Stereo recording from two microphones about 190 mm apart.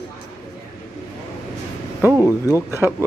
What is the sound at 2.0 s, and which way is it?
Speech, 10° right (ahead or behind).